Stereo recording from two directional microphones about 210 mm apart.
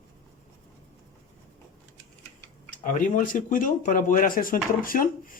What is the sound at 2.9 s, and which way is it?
Speech, 40° left (ahead or behind).